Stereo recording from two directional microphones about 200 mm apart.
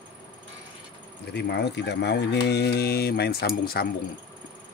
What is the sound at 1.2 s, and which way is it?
Speech, 55° left (ahead or behind).